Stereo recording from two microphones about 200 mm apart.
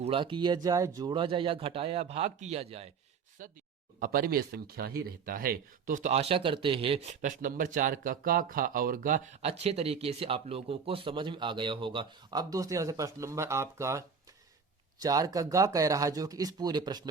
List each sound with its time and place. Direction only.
0.0 s speech: 25° right (ahead or behind)
4.0 s speech: 45° right (ahead or behind); by 17.1 s 20° right (ahead or behind)